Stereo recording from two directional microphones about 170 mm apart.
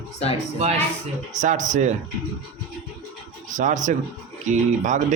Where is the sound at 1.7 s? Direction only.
45° right (ahead or behind).